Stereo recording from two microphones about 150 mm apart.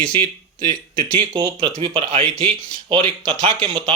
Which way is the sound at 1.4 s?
35° right (ahead or behind).